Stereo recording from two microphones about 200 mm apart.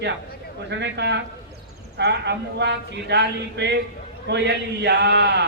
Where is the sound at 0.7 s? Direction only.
60° right (ahead or behind).